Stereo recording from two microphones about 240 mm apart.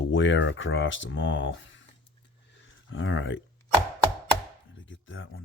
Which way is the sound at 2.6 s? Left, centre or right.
Left.